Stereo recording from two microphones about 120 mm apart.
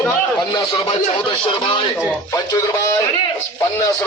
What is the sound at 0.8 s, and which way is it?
Speech, 50° left (ahead or behind).